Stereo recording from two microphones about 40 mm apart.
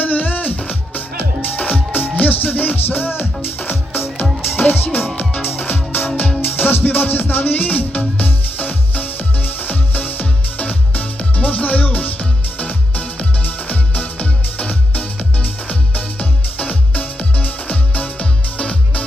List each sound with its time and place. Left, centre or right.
0.0 s music: left